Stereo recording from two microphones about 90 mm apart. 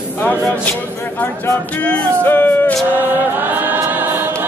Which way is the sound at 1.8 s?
15° left (ahead or behind).